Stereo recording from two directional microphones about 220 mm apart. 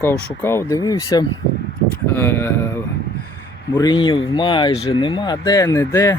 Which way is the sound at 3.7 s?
20° left (ahead or behind).